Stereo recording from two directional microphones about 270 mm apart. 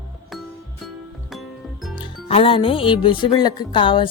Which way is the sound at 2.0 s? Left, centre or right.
Centre.